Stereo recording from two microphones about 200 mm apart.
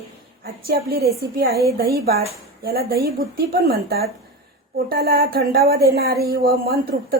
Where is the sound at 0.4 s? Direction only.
50° right (ahead or behind).